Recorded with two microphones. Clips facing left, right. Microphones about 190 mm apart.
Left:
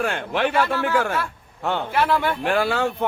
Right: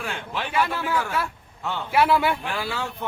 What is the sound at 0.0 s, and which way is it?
Speech, 60° left (ahead or behind).